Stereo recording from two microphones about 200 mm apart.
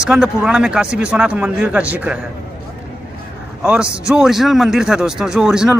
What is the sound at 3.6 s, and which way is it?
A man's voice, 5° right (ahead or behind).